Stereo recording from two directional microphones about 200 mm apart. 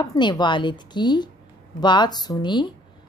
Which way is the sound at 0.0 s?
20° left (ahead or behind).